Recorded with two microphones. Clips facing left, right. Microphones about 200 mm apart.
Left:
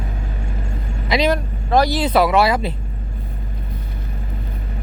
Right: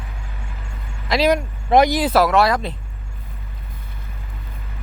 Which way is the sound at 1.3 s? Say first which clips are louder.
Right 2 dB; 20° right (ahead or behind).